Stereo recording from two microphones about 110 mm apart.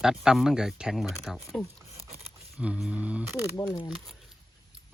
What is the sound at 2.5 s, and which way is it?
Speech, 5° right (ahead or behind).